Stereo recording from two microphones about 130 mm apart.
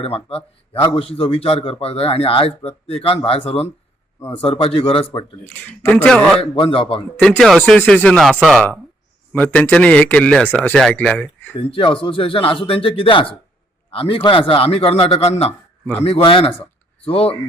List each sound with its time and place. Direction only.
0.0 s a man's voice: 50° left (ahead or behind)
5.8 s a man's voice: 10° left (ahead or behind)
6.4 s a man's voice: 45° left (ahead or behind)
7.2 s a man's voice: 5° left (ahead or behind)
9.3 s a man's voice: 10° left (ahead or behind)
11.5 s a man's voice: 40° left (ahead or behind)